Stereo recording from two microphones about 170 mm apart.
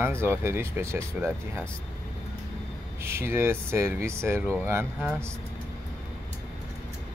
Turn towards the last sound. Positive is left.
turn(degrees=-15)  # may be behind; listen again after turning